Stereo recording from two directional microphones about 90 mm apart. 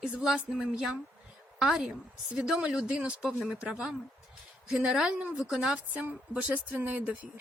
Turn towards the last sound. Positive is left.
turn(degrees=-20)  # may be behind; listen again after turning